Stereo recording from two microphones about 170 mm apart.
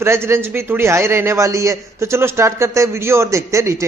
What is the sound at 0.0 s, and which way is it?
A man's voice, 15° right (ahead or behind).